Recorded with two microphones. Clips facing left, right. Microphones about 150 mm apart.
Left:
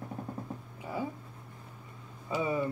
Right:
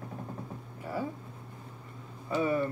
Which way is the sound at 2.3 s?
15° left (ahead or behind).